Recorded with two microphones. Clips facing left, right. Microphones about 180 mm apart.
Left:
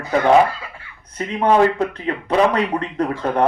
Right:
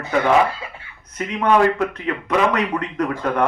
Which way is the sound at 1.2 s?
30° left (ahead or behind).